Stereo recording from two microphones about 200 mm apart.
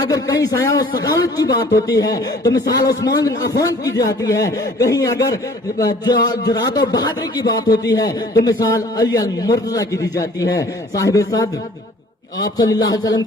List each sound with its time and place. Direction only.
0.0 s a man's voice: 20° left (ahead or behind)